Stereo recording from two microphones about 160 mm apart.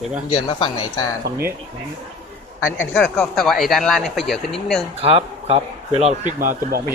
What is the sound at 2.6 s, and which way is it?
Speech, 10° left (ahead or behind).